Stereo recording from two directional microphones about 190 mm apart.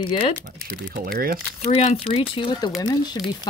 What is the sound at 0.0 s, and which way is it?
Speech, 25° left (ahead or behind).